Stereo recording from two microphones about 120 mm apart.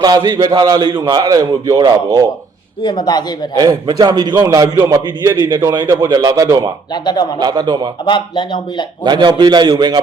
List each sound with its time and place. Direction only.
0.0 s speech: 30° right (ahead or behind)
2.8 s a man's voice: 35° left (ahead or behind)
3.6 s a man's voice: 35° right (ahead or behind)
6.9 s a man's voice: 35° left (ahead or behind)
7.3 s speech: 35° right (ahead or behind)
8.0 s a man's voice: 40° left (ahead or behind)
9.0 s speech: 40° right (ahead or behind)